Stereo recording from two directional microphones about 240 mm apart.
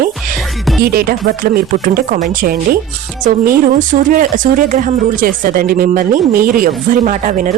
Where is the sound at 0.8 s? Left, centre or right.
Right.